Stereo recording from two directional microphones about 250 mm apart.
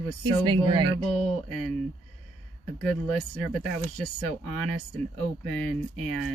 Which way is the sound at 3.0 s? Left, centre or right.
Centre.